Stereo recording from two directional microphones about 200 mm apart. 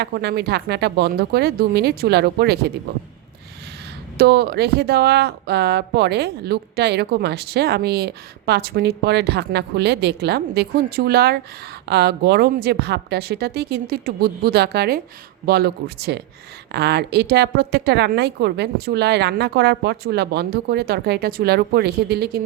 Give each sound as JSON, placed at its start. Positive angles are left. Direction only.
{"t": 0.0, "sound": "speech", "side_deg": -55}
{"t": 4.2, "sound": "speech", "side_deg": -55}